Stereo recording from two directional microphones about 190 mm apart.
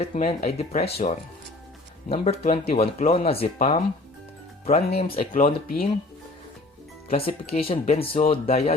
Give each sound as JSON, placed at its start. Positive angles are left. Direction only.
{"t": 0.0, "sound": "speech", "side_deg": 35}
{"t": 5.1, "sound": "speech", "side_deg": 45}
{"t": 7.1, "sound": "speech", "side_deg": 30}